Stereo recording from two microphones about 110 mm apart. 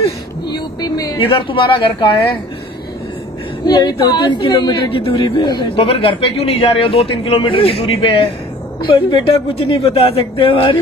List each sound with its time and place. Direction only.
0.5 s a sound: 40° left (ahead or behind)
1.2 s speech: 50° left (ahead or behind)
3.6 s a woman's voice: 40° left (ahead or behind)